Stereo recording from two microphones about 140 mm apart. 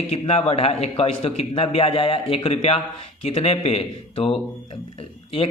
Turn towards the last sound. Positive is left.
turn(degrees=40)  # may be behind; listen again after turning